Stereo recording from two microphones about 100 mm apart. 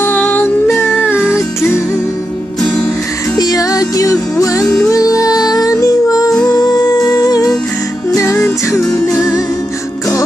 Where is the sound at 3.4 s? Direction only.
40° left (ahead or behind).